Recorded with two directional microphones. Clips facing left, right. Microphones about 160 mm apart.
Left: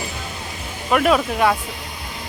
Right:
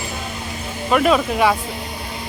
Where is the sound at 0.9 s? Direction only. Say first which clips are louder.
Right 1 dB; centre (ahead or behind).